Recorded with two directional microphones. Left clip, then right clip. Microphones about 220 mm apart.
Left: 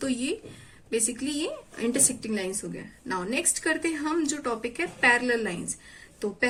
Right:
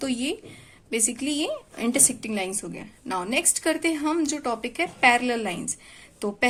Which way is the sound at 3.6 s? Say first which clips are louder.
Right 3 dB; 25° right (ahead or behind).